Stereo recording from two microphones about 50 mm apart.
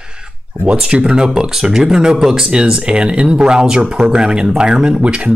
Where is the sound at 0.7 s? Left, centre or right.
Right.